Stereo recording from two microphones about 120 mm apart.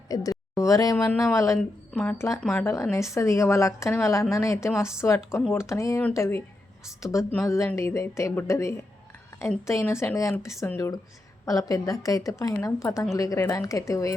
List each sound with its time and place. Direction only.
0.1 s speech: 30° left (ahead or behind)
1.9 s speech: 10° left (ahead or behind)
2.9 s a woman's voice: 25° left (ahead or behind)